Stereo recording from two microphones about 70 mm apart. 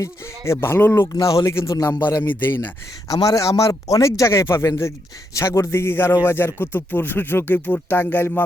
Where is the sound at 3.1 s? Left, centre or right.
Left.